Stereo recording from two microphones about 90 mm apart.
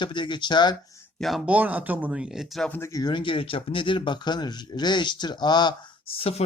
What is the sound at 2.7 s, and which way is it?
Speech, 30° left (ahead or behind).